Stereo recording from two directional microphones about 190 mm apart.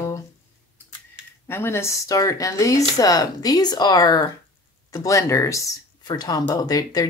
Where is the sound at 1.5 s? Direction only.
10° left (ahead or behind).